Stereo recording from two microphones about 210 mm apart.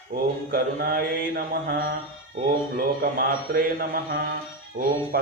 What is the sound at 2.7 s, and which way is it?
Speech, 45° right (ahead or behind).